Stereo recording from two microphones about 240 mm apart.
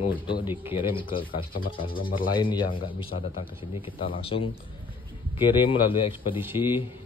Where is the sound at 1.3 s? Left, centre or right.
Left.